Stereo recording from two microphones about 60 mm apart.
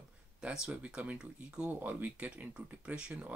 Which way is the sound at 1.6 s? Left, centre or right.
Right.